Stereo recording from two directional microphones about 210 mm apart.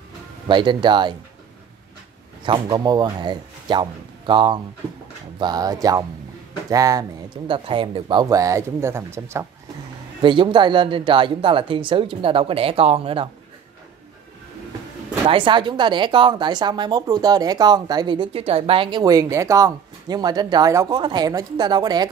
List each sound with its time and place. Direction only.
0.5 s a woman's voice: 20° right (ahead or behind)
2.4 s a woman's voice: 20° right (ahead or behind)
10.2 s a woman's voice: 25° right (ahead or behind)
15.2 s a woman's voice: 25° right (ahead or behind)